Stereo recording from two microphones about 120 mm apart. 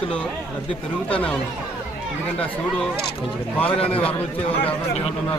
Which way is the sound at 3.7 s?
50° left (ahead or behind).